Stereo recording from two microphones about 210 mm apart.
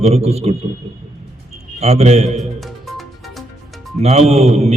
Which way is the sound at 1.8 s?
30° right (ahead or behind).